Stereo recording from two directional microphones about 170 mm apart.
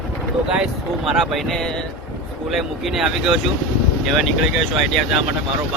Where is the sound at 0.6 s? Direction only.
Centre (ahead or behind).